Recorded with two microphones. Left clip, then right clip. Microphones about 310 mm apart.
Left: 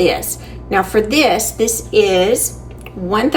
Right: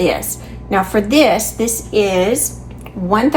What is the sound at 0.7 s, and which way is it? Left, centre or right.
A woman's voice, centre.